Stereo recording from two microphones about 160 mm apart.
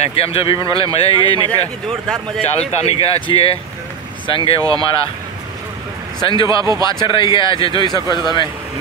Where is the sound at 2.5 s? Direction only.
40° left (ahead or behind).